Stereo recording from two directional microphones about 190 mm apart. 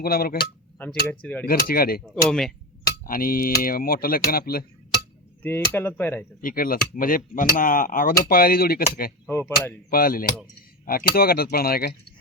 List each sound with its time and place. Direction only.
0.0 s speech: 50° left (ahead or behind)
1.2 s speech: 10° left (ahead or behind)
1.5 s speech: 50° left (ahead or behind)
2.0 s speech: centre (ahead or behind)
2.8 s speech: 50° left (ahead or behind)
5.4 s speech: 10° left (ahead or behind)
6.4 s speech: 50° left (ahead or behind)
9.2 s speech: 10° left (ahead or behind)
9.9 s speech: 50° left (ahead or behind)